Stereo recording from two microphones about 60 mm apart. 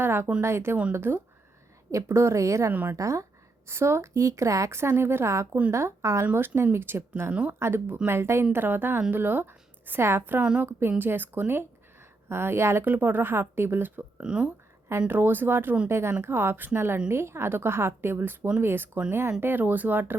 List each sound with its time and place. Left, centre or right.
0.0 s a woman's voice: right
2.0 s a woman's voice: right
3.7 s a woman's voice: right
6.3 s a woman's voice: right
12.8 s a woman's voice: right
14.2 s speech: centre
15.0 s a woman's voice: right